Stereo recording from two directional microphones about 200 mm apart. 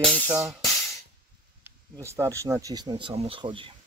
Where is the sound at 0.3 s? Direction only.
15° right (ahead or behind).